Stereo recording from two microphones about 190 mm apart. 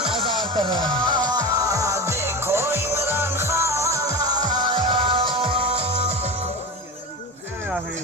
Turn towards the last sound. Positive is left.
turn(degrees=-30)  # may be behind; listen again after turning